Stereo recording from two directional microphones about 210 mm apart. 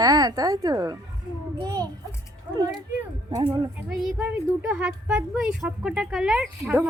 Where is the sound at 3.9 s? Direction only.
5° right (ahead or behind).